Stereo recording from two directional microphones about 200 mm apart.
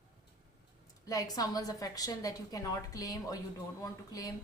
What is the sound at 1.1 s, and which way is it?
A woman's voice, 20° left (ahead or behind).